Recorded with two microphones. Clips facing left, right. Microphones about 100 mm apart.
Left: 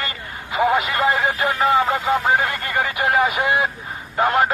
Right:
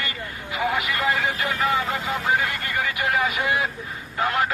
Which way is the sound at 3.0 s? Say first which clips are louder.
Left 6 dB; 25° left (ahead or behind).